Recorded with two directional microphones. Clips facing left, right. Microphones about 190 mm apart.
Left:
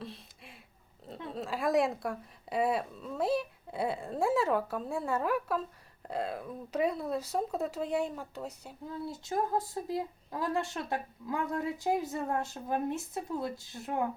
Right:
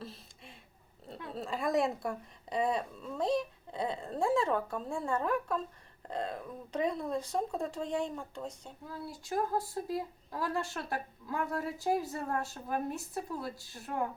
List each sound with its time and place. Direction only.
0.0 s a sound: centre (ahead or behind)
1.3 s a woman's voice: centre (ahead or behind)
8.9 s speech: 20° left (ahead or behind)